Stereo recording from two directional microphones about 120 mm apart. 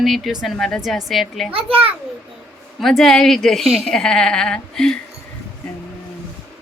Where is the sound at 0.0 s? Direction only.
Centre (ahead or behind).